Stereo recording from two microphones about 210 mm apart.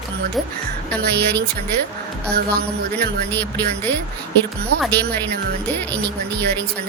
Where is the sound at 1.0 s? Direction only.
50° right (ahead or behind).